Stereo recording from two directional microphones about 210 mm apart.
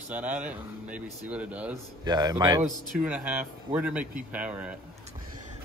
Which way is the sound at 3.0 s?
5° right (ahead or behind).